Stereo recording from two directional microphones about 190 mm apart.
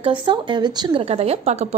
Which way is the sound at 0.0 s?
25° right (ahead or behind).